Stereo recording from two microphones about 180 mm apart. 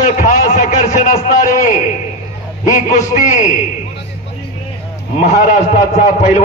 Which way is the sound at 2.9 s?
45° left (ahead or behind).